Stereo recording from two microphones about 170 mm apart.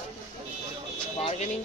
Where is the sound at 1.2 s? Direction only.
35° left (ahead or behind).